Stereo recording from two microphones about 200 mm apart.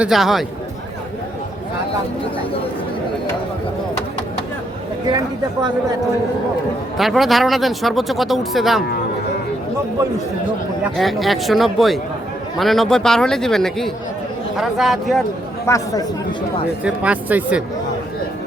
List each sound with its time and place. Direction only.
0.0 s speech: centre (ahead or behind)
6.9 s speech: centre (ahead or behind)
10.9 s speech: centre (ahead or behind)
15.6 s speech: 15° left (ahead or behind)
16.8 s speech: 5° right (ahead or behind)